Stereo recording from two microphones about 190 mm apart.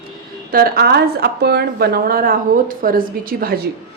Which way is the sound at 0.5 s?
50° right (ahead or behind).